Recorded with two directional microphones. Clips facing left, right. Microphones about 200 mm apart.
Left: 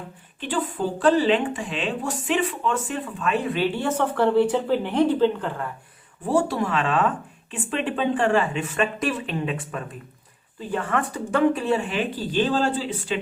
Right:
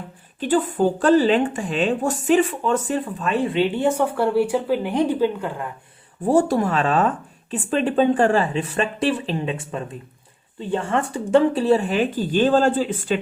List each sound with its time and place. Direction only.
0.3 s speech: 45° right (ahead or behind); by 5.6 s 10° right (ahead or behind)
6.2 s speech: 45° right (ahead or behind)